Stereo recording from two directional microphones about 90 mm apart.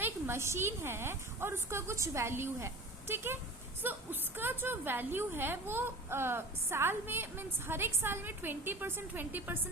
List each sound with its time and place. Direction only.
0.0 s a woman's voice: 30° right (ahead or behind)